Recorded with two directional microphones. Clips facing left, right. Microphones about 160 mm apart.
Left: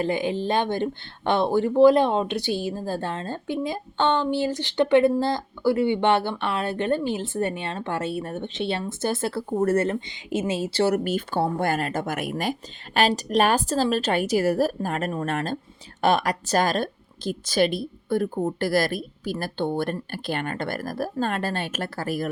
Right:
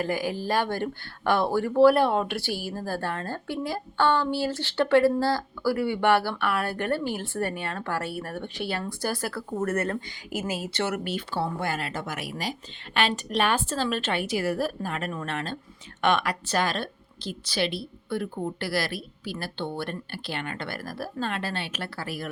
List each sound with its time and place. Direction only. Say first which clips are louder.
0.0 s speech: left 4 dB; 25° left (ahead or behind); by 22.3 s 45° left (ahead or behind)